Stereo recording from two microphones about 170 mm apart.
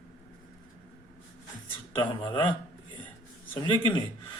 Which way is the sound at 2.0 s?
30° left (ahead or behind).